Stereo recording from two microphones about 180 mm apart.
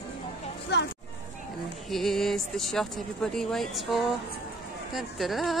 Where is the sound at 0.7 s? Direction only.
70° left (ahead or behind).